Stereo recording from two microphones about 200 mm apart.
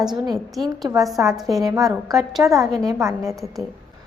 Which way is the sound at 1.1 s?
15° right (ahead or behind).